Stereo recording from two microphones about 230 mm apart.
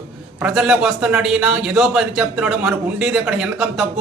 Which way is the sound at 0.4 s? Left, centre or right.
Centre.